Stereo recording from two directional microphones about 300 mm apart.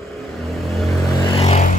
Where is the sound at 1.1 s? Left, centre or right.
Centre.